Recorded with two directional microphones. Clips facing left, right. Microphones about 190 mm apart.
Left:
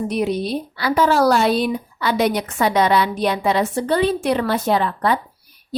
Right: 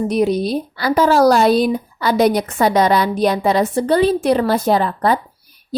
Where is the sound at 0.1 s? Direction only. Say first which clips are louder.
Right 4 dB; 40° right (ahead or behind).